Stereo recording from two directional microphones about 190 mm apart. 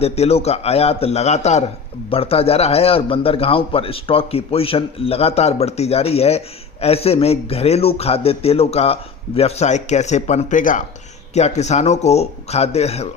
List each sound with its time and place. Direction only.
0.0 s a man's voice: 35° left (ahead or behind)